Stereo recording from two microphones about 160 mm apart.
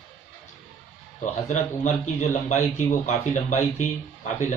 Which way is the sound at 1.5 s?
45° left (ahead or behind).